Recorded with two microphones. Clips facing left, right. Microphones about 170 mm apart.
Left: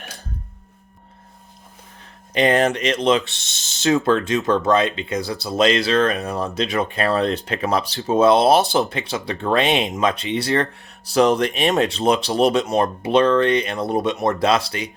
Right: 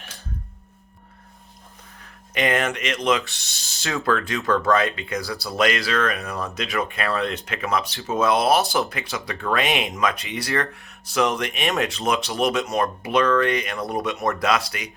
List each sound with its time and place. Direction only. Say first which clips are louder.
2.3 s speech: left 6 dB; 30° left (ahead or behind)